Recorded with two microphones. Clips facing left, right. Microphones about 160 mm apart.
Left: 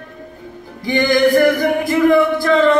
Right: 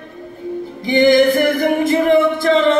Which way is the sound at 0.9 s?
20° right (ahead or behind).